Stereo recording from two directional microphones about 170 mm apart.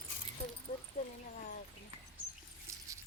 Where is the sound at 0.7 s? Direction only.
45° left (ahead or behind).